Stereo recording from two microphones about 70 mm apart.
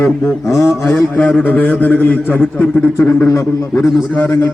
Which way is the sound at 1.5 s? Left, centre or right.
Left.